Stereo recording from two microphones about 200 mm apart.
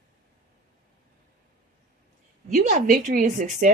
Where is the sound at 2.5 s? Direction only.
40° right (ahead or behind).